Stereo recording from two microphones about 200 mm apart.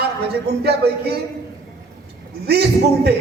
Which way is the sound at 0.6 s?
55° right (ahead or behind).